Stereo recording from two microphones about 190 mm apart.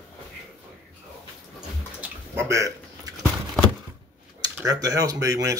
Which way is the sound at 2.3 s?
15° right (ahead or behind).